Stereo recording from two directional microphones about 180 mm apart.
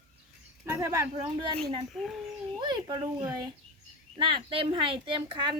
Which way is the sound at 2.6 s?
25° right (ahead or behind).